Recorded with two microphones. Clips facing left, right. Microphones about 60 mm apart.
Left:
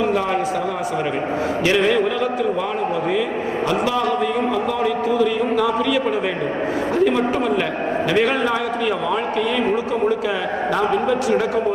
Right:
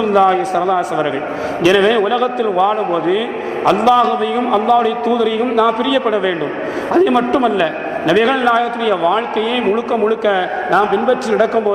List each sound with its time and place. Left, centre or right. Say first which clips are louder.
0.0 s a man's voice: right 7 dB; right
1.6 s a man's voice: right 7 dB; right
3.7 s a man's voice: right 10 dB; right